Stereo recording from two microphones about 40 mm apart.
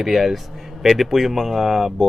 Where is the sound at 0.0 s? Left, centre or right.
Centre.